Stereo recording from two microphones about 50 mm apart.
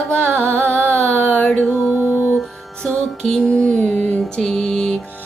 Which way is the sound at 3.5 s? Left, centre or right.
Left.